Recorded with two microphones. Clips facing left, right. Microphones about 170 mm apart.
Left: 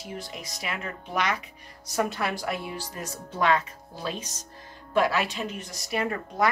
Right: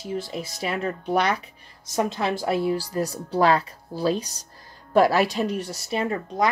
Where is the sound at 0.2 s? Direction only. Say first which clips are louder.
Right 7 dB; 30° right (ahead or behind).